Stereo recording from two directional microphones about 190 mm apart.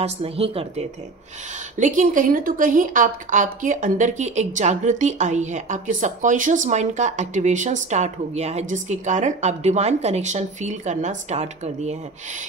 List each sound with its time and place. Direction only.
0.0 s a woman's voice: 30° right (ahead or behind)
1.8 s a woman's voice: 40° right (ahead or behind)